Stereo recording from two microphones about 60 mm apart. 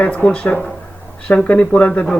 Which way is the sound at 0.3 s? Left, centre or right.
Left.